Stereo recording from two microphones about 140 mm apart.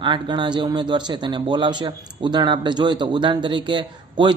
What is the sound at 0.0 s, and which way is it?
A woman's voice, 35° right (ahead or behind).